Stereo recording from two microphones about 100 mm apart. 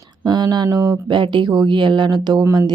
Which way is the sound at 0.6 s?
35° right (ahead or behind).